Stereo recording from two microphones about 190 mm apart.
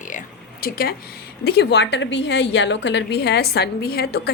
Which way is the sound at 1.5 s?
60° left (ahead or behind).